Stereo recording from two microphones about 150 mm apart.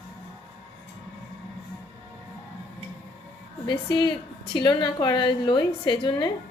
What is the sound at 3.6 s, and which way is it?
A woman's voice, 35° left (ahead or behind).